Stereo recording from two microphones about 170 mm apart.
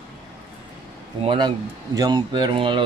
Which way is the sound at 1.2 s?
30° right (ahead or behind).